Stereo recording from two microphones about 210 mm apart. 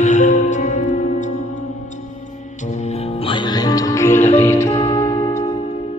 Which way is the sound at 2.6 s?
35° left (ahead or behind).